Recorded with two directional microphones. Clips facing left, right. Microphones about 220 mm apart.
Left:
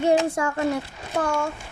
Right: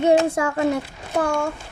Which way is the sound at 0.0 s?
20° right (ahead or behind).